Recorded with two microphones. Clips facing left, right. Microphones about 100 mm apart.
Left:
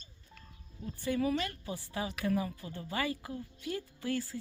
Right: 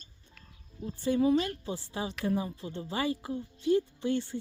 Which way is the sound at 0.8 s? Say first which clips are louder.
Right 5 dB; 30° right (ahead or behind).